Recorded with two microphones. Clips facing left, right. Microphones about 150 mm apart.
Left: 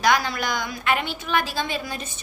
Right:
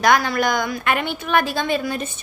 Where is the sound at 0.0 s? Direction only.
50° right (ahead or behind).